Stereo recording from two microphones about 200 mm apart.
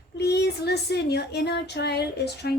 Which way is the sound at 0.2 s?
55° left (ahead or behind).